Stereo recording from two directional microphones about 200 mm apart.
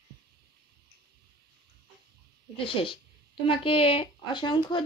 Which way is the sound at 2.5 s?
25° left (ahead or behind).